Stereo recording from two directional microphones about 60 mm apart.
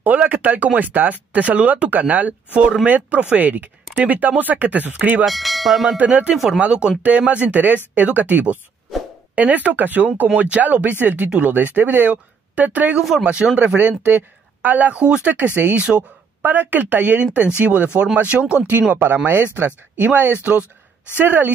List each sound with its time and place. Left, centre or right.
0.0 s speech: right
5.2 s speech: centre
5.9 s speech: right
6.3 s speech: centre
6.6 s speech: centre